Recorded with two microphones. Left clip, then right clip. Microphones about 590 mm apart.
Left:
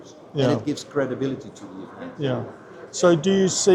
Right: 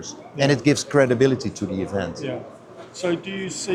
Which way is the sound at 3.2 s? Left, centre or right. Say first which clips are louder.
Left 11 dB; left.